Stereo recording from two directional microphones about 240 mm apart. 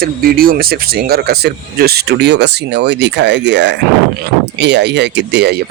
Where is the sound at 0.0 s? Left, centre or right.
Right.